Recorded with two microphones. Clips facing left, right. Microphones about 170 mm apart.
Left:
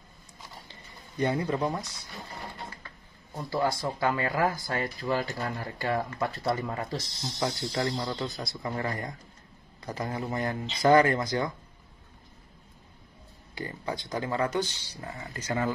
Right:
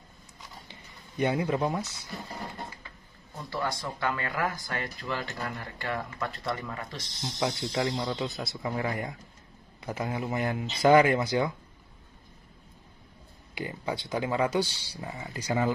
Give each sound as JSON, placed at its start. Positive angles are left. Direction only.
{"t": 1.1, "sound": "speech", "side_deg": -15}
{"t": 3.3, "sound": "speech", "side_deg": 25}
{"t": 7.3, "sound": "speech", "side_deg": -10}
{"t": 13.6, "sound": "speech", "side_deg": -10}